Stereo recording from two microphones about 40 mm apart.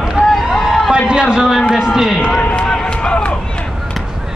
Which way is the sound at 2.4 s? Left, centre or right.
Left.